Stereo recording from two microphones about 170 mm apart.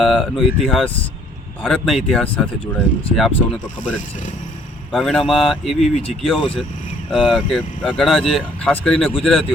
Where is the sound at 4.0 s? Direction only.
50° left (ahead or behind).